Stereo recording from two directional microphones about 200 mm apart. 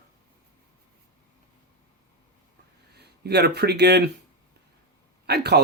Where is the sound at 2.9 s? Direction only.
55° right (ahead or behind).